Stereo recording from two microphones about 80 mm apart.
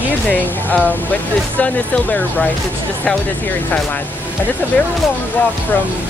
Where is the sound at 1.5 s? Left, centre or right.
Centre.